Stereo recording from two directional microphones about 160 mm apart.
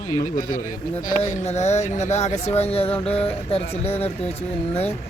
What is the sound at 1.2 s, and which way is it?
Speech, 45° left (ahead or behind).